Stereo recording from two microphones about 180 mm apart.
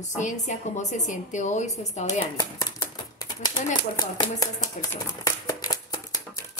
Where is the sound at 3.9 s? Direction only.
25° left (ahead or behind).